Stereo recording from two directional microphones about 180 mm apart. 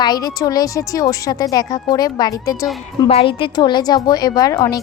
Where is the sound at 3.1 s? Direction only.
30° left (ahead or behind).